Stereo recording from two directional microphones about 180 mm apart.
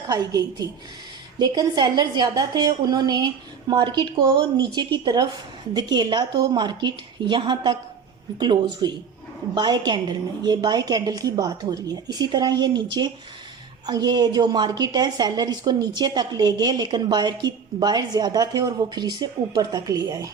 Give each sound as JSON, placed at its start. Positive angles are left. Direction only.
{"t": 0.1, "sound": "a woman's voice", "side_deg": -20}